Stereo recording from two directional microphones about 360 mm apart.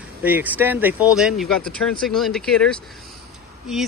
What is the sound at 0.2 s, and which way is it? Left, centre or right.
Speech, centre.